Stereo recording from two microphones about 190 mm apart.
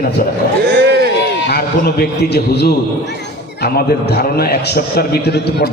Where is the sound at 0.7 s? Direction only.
60° right (ahead or behind).